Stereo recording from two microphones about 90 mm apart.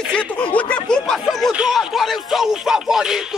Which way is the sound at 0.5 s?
15° left (ahead or behind).